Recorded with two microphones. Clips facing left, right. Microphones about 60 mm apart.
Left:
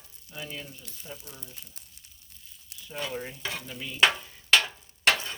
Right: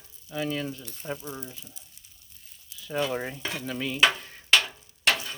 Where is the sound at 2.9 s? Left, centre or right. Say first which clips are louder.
Right 6 dB; right.